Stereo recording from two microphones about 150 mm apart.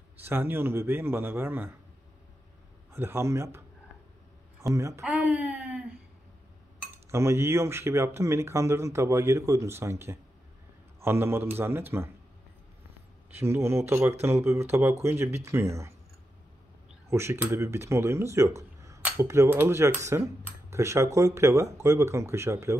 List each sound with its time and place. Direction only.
0.2 s speech: 15° right (ahead or behind)
2.9 s speech: 15° right (ahead or behind)
7.1 s speech: 20° right (ahead or behind)
13.3 s speech: 15° right (ahead or behind)
17.1 s speech: 15° right (ahead or behind)